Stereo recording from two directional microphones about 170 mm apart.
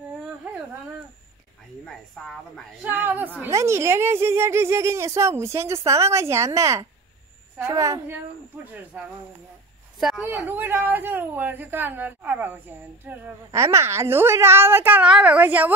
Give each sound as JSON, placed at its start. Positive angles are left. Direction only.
{"t": 1.9, "sound": "speech", "side_deg": 5}
{"t": 2.8, "sound": "a woman's voice", "side_deg": -10}
{"t": 10.2, "sound": "a woman's voice", "side_deg": -10}